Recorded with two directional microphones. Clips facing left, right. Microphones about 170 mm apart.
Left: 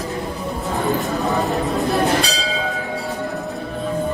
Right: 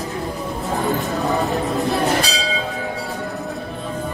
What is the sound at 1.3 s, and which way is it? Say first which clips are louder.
Speech: even; centre (ahead or behind).